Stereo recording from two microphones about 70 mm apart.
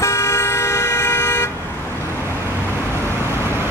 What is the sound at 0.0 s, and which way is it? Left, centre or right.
Toot, left.